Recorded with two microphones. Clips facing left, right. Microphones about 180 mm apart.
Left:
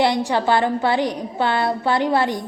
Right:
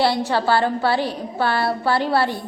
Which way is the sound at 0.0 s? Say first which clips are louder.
Left 1 dB; 15° left (ahead or behind).